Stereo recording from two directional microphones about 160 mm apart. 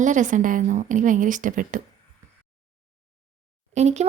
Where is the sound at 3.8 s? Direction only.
45° right (ahead or behind).